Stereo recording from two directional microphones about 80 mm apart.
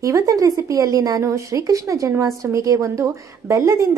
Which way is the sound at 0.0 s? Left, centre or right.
Right.